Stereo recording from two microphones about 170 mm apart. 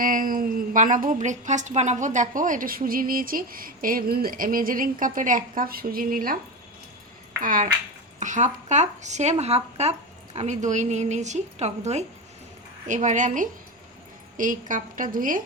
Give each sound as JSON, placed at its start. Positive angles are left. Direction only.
{"t": 0.0, "sound": "a woman's voice", "side_deg": -55}
{"t": 7.4, "sound": "speech", "side_deg": -50}